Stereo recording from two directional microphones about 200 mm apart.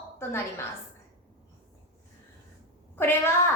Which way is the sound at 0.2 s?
10° left (ahead or behind).